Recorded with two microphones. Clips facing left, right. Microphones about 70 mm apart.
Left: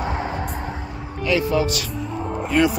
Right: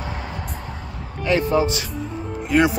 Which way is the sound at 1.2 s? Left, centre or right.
Right.